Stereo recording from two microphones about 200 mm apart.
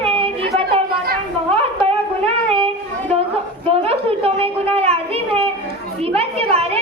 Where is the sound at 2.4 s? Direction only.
30° right (ahead or behind).